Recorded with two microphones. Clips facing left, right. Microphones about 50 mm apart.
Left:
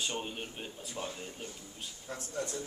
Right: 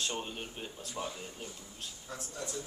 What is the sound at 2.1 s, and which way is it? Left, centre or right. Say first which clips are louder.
Speech: left 4 dB; left.